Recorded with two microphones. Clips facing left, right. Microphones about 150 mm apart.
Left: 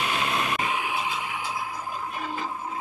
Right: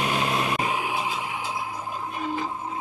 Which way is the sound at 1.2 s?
20° right (ahead or behind).